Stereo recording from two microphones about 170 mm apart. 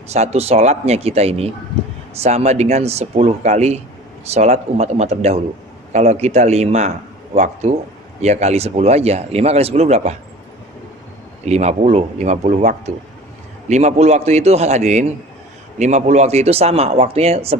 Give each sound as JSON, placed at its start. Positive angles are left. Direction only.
{"t": 0.1, "sound": "speech", "side_deg": -40}
{"t": 11.4, "sound": "speech", "side_deg": -40}